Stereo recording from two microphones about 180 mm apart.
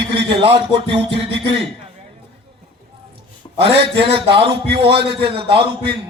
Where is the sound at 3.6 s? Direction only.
30° right (ahead or behind).